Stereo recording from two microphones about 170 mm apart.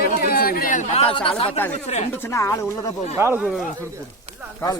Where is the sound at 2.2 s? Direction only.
15° left (ahead or behind).